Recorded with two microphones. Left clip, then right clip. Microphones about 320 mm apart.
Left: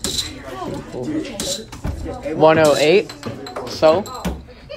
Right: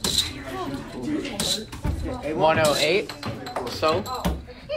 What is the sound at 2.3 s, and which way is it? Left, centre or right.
A man's voice, left.